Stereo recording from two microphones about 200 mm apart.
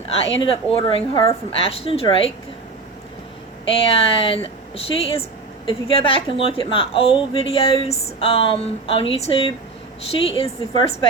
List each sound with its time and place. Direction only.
0.3 s a woman's voice: 30° left (ahead or behind)
3.7 s a woman's voice: 30° left (ahead or behind)